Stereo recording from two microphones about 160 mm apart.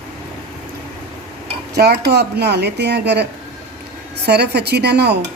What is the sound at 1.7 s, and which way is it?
A woman's voice, 85° right.